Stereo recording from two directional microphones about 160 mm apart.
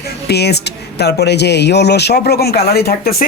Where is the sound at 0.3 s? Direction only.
90° left.